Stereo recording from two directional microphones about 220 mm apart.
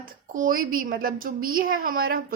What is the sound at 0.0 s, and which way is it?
A woman's voice, 40° right (ahead or behind).